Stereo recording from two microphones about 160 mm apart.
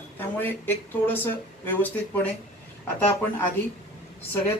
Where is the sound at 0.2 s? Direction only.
15° left (ahead or behind).